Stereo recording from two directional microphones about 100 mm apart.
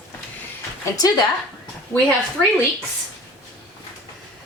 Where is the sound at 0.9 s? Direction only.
40° left (ahead or behind).